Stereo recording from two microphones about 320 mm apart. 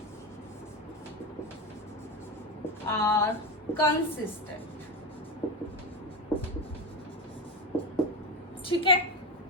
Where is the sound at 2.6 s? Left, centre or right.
Centre.